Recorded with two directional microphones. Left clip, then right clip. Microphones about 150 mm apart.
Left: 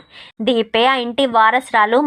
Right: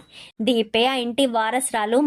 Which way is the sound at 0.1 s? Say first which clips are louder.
Left 4 dB; 15° right (ahead or behind).